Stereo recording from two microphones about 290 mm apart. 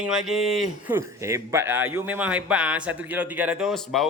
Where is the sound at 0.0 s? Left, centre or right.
Centre.